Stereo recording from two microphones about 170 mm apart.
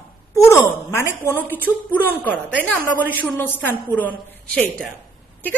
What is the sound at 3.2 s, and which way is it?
A woman's voice, 10° left (ahead or behind).